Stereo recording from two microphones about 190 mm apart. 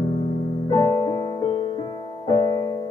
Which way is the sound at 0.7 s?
30° left (ahead or behind).